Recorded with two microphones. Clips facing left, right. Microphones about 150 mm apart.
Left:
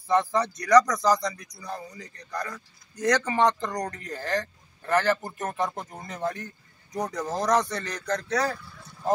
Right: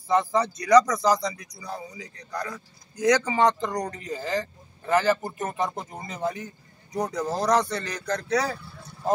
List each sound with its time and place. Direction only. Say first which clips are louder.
0.1 s speech: right 1 dB; 10° right (ahead or behind)
3.7 s speech: right 2 dB; 5° right (ahead or behind)
5.6 s speech: even; 20° right (ahead or behind)
6.3 s a sound: right 2 dB; 5° right (ahead or behind)
7.0 s speech: right 2 dB; 15° right (ahead or behind)